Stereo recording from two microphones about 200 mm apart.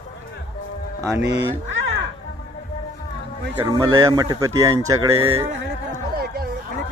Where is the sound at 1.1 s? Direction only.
15° right (ahead or behind).